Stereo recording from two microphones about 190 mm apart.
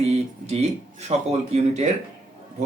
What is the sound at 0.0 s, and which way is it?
Speech, 35° right (ahead or behind).